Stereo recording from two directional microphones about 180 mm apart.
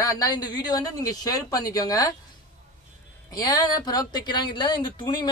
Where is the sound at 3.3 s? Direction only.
20° left (ahead or behind).